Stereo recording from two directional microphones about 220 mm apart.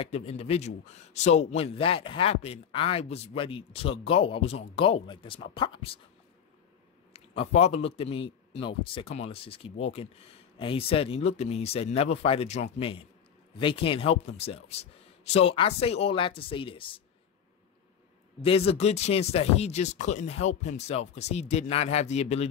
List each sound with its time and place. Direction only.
0.0 s a man's voice: 25° left (ahead or behind)
7.1 s a man's voice: 25° left (ahead or behind)
18.7 s a man's voice: 30° left (ahead or behind)